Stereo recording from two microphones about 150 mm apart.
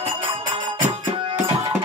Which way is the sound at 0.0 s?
35° right (ahead or behind).